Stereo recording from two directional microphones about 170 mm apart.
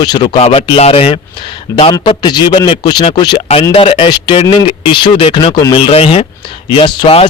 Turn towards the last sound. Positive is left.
turn(degrees=30)  # may be behind; listen again after turning